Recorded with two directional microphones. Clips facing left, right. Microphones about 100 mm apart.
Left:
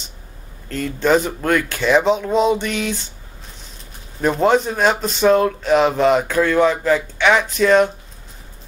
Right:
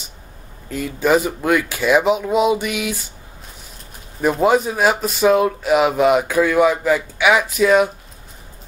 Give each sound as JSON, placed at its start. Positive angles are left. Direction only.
{"t": 0.7, "sound": "speech", "side_deg": -10}
{"t": 4.2, "sound": "speech", "side_deg": -5}